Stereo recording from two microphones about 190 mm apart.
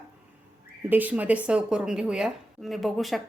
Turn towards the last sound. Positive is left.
turn(degrees=0)  # may be behind; listen again after turning